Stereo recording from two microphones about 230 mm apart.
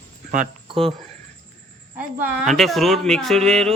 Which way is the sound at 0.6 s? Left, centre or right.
Right.